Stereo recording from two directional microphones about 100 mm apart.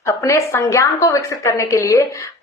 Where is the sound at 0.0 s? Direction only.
30° left (ahead or behind).